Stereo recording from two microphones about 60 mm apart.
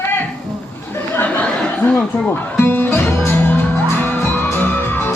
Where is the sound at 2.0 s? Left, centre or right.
Centre.